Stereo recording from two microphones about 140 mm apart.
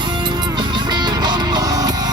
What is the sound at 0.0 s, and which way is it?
Music, 35° right (ahead or behind).